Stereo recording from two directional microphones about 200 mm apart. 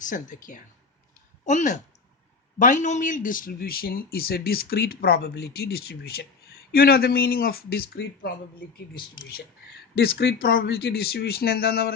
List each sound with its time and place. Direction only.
0.0 s speech: 40° left (ahead or behind)
10.2 s speech: 60° left (ahead or behind)